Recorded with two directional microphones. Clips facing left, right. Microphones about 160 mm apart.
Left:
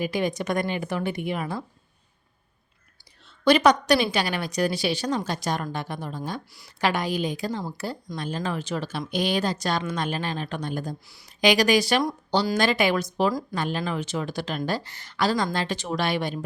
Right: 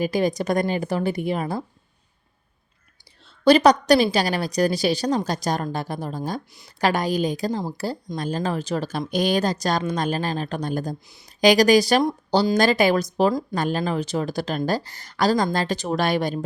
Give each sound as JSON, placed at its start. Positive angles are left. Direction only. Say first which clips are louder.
{"t": 0.0, "sound": "speech", "louder": "right 4 dB", "side_deg": -40}
{"t": 3.4, "sound": "speech", "louder": "right 3 dB", "side_deg": -35}